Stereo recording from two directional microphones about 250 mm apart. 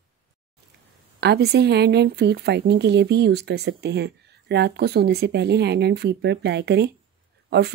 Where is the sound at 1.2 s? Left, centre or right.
Right.